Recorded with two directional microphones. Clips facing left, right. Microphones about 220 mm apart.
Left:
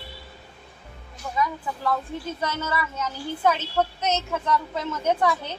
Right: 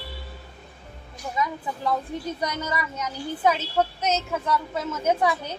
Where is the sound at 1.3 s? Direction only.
20° right (ahead or behind).